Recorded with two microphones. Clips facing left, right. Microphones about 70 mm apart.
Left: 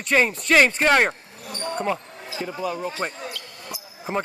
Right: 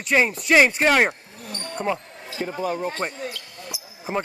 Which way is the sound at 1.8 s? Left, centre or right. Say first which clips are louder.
Right 3 dB; centre.